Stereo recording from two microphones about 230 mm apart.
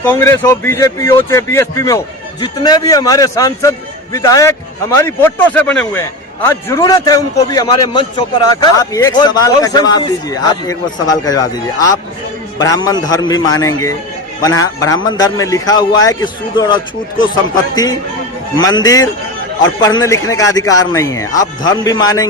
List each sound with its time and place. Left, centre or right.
0.0 s a man's voice: centre
18.5 s a man's voice: centre